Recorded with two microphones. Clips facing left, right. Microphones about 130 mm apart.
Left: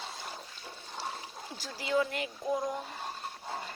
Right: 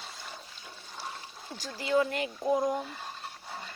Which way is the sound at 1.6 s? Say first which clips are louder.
Right 3 dB; 5° left (ahead or behind).